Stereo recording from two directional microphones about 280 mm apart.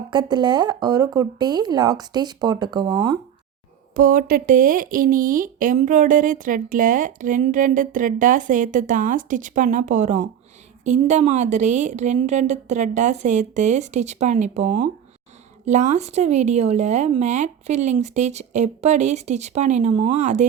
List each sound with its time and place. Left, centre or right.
0.1 s speech: centre
3.9 s speech: right